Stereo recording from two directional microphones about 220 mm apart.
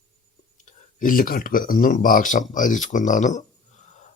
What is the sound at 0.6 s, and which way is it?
Speech, 40° left (ahead or behind).